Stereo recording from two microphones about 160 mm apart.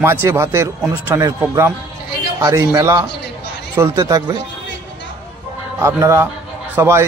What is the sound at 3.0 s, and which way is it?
Music, 90° left.